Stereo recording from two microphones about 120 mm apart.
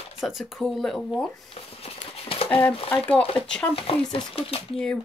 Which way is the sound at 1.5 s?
50° left (ahead or behind).